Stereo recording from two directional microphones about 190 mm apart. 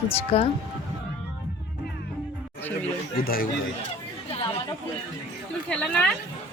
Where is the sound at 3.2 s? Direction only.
50° left (ahead or behind).